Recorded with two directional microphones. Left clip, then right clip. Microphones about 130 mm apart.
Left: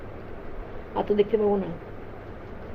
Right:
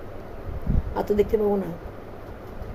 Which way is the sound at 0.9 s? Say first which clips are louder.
Right 1 dB; 25° right (ahead or behind).